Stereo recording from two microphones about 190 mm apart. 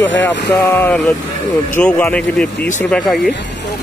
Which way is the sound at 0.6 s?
10° left (ahead or behind).